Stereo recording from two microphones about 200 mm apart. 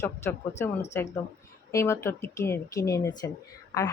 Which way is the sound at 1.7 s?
15° left (ahead or behind).